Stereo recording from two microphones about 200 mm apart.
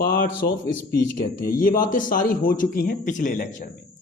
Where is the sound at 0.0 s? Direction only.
45° left (ahead or behind).